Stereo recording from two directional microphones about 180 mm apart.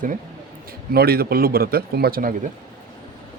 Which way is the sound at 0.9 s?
60° right (ahead or behind).